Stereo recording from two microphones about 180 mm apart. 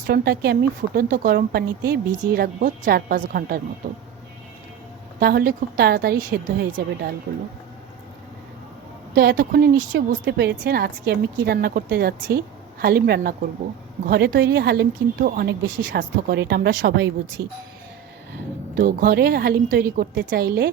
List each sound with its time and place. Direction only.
0.1 s a woman's voice: 60° right (ahead or behind)
5.2 s a woman's voice: 60° right (ahead or behind)
9.1 s a woman's voice: 60° right (ahead or behind)
10.6 s a woman's voice: 55° right (ahead or behind)
14.1 s a woman's voice: 65° right (ahead or behind)
18.7 s a woman's voice: 50° right (ahead or behind)